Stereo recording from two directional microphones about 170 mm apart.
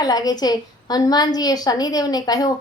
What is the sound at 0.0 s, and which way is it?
A woman's voice, 20° left (ahead or behind).